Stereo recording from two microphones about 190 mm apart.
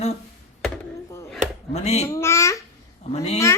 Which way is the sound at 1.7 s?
35° left (ahead or behind).